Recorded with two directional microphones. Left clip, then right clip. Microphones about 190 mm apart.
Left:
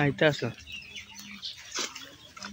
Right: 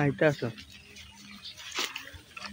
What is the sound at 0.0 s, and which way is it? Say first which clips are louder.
Speech: left 1 dB; 5° right (ahead or behind).